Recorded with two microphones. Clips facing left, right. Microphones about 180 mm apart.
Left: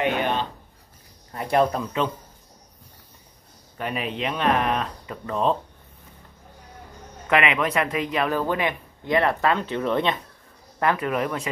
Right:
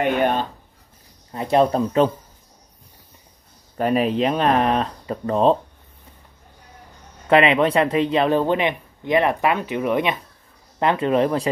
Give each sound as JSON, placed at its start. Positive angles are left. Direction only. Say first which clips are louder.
{"t": 0.0, "sound": "a sound", "louder": "right 4 dB", "side_deg": -50}
{"t": 1.3, "sound": "speech", "louder": "right 4 dB", "side_deg": -25}
{"t": 3.7, "sound": "speech", "louder": "right 10 dB", "side_deg": -40}
{"t": 7.2, "sound": "speech", "louder": "right 6 dB", "side_deg": -30}
{"t": 10.8, "sound": "speech", "louder": "right 5 dB", "side_deg": -25}